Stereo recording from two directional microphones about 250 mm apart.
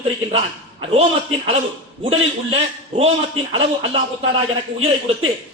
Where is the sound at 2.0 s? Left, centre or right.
Right.